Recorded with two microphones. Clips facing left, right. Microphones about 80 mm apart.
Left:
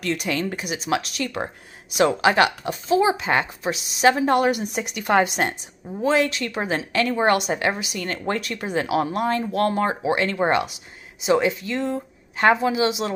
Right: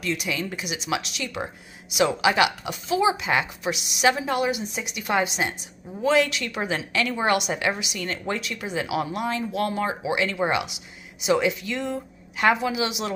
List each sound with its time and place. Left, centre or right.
0.0 s speech: left
4.3 s a woman's voice: left
6.0 s speech: left
11.1 s speech: left